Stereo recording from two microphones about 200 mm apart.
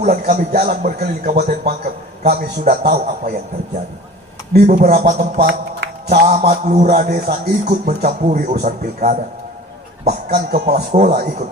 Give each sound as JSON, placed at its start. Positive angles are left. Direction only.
{"t": 0.0, "sound": "speech", "side_deg": -40}
{"t": 4.5, "sound": "a man's voice", "side_deg": -45}
{"t": 6.2, "sound": "music", "side_deg": -35}
{"t": 10.1, "sound": "speech", "side_deg": -50}